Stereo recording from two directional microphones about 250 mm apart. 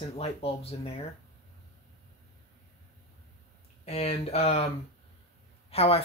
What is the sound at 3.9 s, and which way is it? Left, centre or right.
Speech, left.